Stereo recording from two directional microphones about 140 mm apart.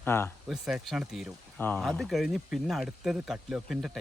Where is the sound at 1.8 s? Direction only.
Centre (ahead or behind).